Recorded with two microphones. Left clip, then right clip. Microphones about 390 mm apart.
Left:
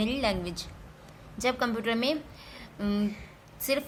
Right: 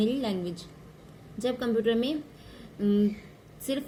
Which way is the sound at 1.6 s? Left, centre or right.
Left.